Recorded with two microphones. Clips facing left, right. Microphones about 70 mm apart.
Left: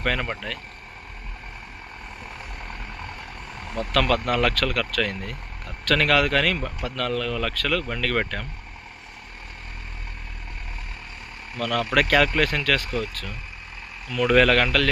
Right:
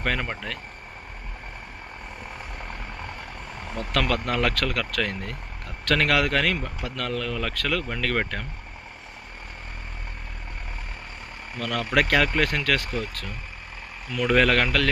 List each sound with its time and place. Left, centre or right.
0.0 s speech: centre
2.6 s vehicle: centre
3.6 s speech: right
11.5 s speech: right
14.3 s speech: right